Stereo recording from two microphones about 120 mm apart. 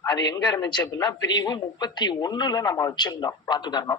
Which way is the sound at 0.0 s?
35° left (ahead or behind).